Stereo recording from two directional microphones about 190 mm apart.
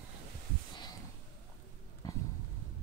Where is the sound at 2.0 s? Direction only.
20° left (ahead or behind).